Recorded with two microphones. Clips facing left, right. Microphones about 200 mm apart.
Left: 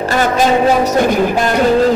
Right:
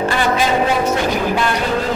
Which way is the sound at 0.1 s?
45° left (ahead or behind).